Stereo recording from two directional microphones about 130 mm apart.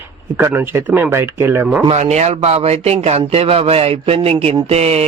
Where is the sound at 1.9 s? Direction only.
60° right (ahead or behind).